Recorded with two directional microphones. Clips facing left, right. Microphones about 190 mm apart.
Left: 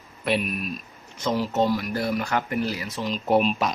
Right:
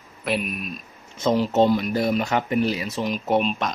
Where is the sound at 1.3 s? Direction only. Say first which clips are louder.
Right 4 dB; 20° right (ahead or behind).